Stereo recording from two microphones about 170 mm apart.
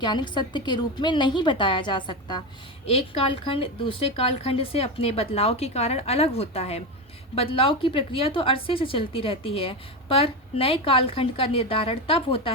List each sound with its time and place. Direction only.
0.0 s a woman's voice: 25° left (ahead or behind)